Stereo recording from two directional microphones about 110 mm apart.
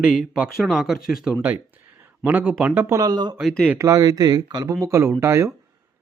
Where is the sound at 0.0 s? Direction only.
5° right (ahead or behind).